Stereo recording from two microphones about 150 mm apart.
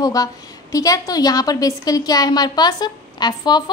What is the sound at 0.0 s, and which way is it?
A woman's voice, 25° left (ahead or behind).